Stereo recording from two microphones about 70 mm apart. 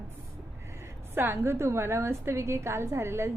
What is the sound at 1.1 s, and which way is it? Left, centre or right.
A woman's voice, right.